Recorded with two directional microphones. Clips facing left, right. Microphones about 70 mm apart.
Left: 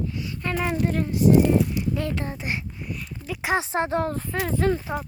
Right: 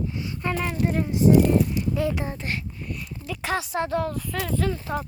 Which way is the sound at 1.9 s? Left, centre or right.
Centre.